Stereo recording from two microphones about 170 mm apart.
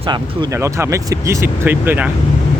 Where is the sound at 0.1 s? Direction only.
15° right (ahead or behind).